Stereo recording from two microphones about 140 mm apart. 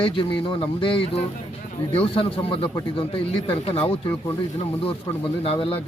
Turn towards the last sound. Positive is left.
turn(degrees=40)  # may be behind; listen again after turning